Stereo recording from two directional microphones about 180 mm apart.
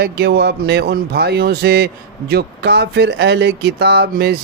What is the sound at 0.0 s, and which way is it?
Speech, 65° right (ahead or behind).